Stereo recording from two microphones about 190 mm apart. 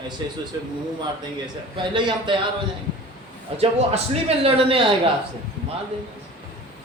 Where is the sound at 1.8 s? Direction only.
25° right (ahead or behind).